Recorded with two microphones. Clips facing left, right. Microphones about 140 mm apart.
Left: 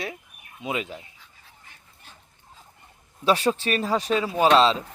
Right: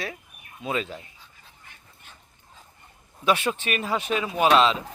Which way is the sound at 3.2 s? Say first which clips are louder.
Left 2 dB; 35° left (ahead or behind).